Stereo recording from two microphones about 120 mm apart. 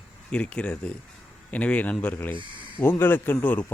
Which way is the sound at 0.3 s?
10° left (ahead or behind).